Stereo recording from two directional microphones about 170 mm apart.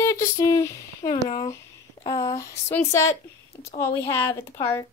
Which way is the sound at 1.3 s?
25° left (ahead or behind).